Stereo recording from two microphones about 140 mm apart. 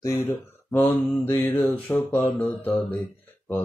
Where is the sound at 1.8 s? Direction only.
15° left (ahead or behind).